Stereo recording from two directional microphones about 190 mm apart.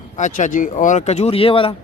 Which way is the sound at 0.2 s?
40° left (ahead or behind).